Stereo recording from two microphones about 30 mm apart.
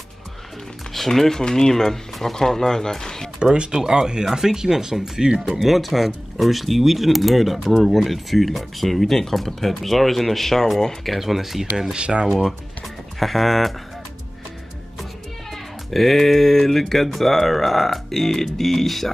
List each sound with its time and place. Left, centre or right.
0.9 s speech: centre
3.7 s speech: right
5.4 s speech: centre
11.1 s speech: centre
11.9 s speech: right
12.8 s music: centre
15.5 s speech: centre